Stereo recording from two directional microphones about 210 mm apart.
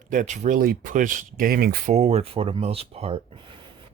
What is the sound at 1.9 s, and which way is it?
Speech, 30° right (ahead or behind).